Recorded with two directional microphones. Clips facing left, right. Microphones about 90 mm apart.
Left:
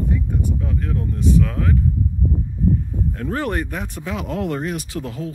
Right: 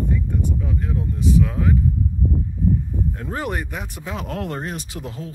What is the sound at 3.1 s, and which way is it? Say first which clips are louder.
Speech: left 6 dB; 20° right (ahead or behind).